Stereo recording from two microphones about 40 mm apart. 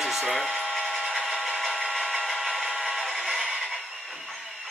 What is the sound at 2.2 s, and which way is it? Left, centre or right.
Tools, centre.